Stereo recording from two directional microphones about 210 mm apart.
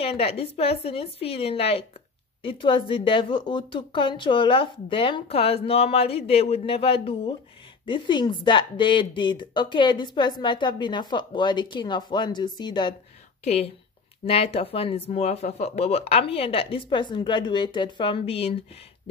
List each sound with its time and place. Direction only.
0.0 s a woman's voice: 30° left (ahead or behind)